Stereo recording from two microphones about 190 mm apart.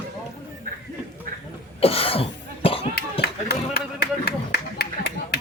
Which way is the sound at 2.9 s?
55° left (ahead or behind).